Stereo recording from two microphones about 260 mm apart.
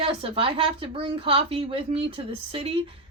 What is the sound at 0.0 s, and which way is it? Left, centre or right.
A woman's voice, right.